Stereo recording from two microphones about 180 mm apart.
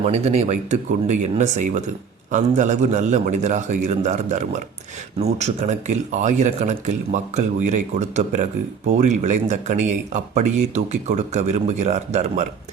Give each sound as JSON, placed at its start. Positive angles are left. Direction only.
{"t": 0.0, "sound": "speech", "side_deg": -35}